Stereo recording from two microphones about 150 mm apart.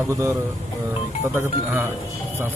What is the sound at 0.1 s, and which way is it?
A man's voice, 20° right (ahead or behind).